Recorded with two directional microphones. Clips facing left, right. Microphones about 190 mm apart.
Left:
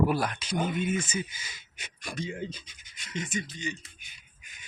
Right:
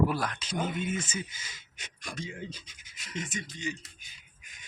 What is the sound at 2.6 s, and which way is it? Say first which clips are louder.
Speech: even; 5° right (ahead or behind).